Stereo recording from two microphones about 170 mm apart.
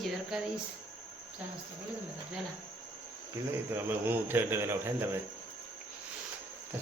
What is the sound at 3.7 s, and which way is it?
Speech, 10° right (ahead or behind).